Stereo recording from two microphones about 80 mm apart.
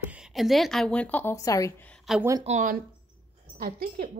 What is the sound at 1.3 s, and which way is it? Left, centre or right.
Speech, left.